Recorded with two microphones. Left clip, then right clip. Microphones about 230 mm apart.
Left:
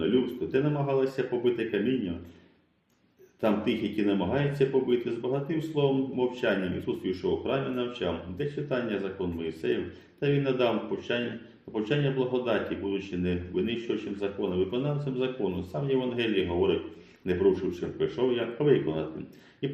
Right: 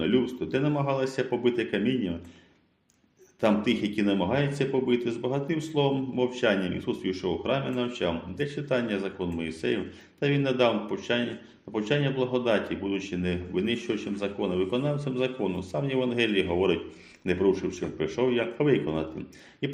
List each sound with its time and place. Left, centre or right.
0.0 s speech: right
3.4 s speech: right